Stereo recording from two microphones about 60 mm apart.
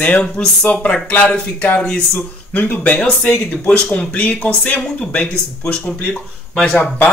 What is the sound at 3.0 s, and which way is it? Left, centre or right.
A man's voice, centre.